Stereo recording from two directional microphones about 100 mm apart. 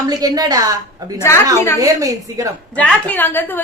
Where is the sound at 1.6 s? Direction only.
25° left (ahead or behind).